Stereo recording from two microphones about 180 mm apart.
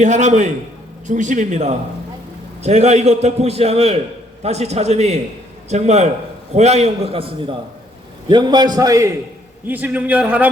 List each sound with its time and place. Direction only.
0.0 s a man's voice: 40° right (ahead or behind); by 10.5 s 10° right (ahead or behind)